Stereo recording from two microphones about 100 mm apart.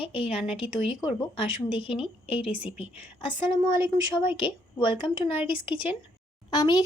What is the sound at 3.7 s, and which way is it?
Speech, 25° right (ahead or behind).